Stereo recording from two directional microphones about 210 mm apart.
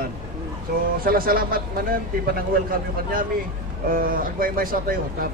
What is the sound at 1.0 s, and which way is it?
A man's voice, 45° right (ahead or behind).